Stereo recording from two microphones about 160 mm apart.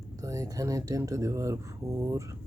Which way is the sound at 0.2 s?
20° right (ahead or behind).